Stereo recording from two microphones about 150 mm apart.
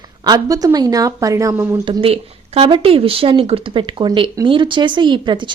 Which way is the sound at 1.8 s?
35° right (ahead or behind).